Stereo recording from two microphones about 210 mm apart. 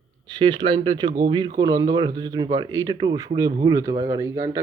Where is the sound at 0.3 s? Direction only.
20° right (ahead or behind).